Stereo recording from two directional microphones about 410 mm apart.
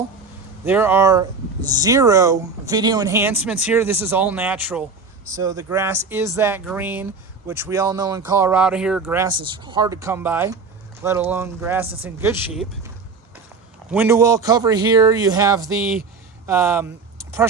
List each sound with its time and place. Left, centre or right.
0.6 s speech: centre
13.9 s speech: centre